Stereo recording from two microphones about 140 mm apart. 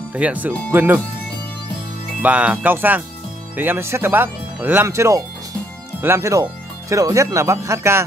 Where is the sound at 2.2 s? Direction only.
10° right (ahead or behind).